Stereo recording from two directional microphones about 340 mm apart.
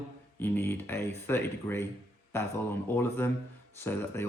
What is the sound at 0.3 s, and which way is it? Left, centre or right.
Speech, centre.